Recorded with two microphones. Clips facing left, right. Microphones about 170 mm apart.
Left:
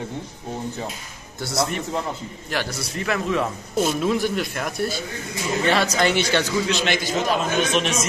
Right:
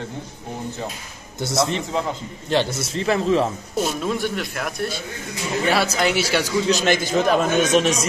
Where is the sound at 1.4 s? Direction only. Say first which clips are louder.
Right 3 dB; 25° right (ahead or behind).